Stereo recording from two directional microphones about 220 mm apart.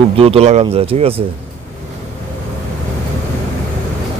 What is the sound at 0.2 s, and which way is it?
Speech, 25° right (ahead or behind).